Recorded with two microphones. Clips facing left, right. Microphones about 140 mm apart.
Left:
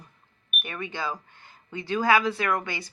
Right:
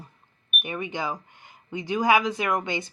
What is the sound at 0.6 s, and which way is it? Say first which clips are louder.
Speech: right 3 dB; 15° right (ahead or behind).